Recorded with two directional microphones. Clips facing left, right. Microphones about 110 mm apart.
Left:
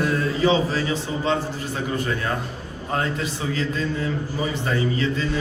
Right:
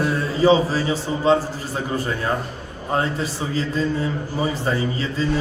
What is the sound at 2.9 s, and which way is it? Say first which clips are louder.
Speech: right 3 dB; 35° right (ahead or behind).